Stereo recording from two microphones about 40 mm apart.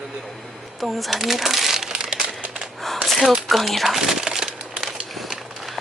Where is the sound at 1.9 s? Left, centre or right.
Centre.